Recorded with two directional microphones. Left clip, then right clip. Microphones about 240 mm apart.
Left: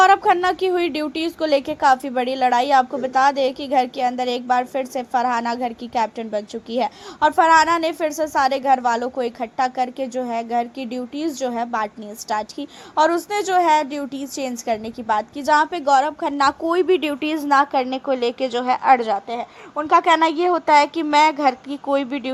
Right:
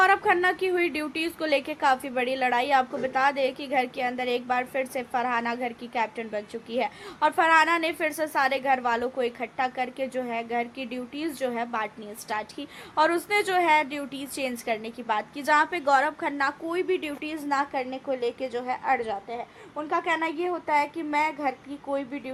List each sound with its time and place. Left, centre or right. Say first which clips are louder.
0.0 s a woman's voice: left 7 dB; centre
16.4 s speech: left 11 dB; left